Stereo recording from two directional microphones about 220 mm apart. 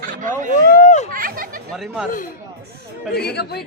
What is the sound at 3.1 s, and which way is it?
Speech, 45° left (ahead or behind).